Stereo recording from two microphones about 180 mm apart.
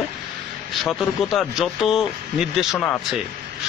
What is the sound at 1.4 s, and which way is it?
Speech, centre (ahead or behind).